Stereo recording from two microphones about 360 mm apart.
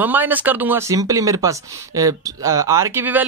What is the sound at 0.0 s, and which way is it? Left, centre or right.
Speech, centre.